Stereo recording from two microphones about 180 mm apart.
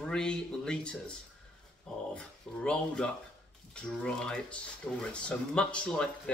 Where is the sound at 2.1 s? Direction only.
5° left (ahead or behind).